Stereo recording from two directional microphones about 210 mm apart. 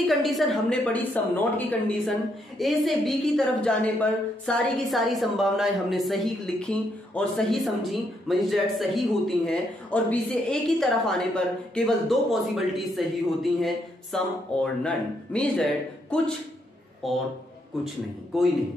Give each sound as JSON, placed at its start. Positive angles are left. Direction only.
{"t": 0.0, "sound": "a woman's voice", "side_deg": 0}